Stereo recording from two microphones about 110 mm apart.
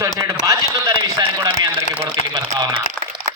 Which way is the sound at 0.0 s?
30° right (ahead or behind).